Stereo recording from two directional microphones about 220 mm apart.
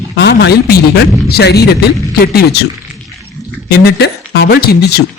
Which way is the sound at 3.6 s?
45° left (ahead or behind).